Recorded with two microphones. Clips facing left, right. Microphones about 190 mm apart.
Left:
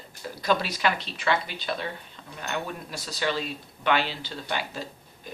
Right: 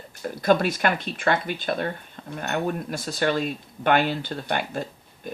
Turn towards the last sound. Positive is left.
turn(degrees=-50)  # may be behind; listen again after turning